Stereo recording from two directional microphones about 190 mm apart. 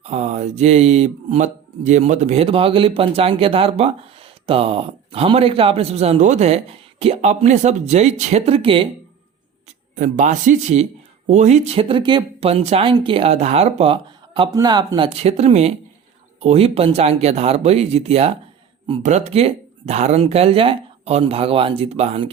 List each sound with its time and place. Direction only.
0.0 s speech: 35° right (ahead or behind)
9.9 s speech: 40° right (ahead or behind)